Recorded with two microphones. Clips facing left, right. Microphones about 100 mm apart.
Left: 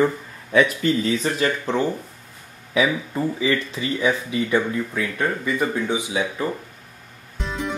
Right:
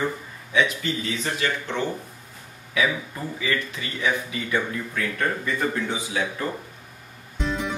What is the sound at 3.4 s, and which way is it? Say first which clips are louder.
Speech: left 5 dB; 30° left (ahead or behind).